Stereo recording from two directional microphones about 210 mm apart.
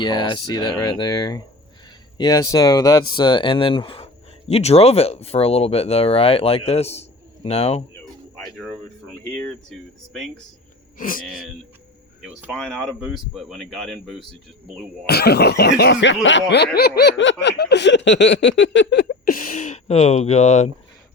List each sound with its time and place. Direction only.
0.0 s speech: 20° left (ahead or behind)
8.4 s speech: centre (ahead or behind)
10.9 s speech: 40° left (ahead or behind)
12.2 s speech: 5° right (ahead or behind)
15.0 s speech: 50° left (ahead or behind)
15.8 s a sound: 55° left (ahead or behind)
19.3 s speech: 40° left (ahead or behind)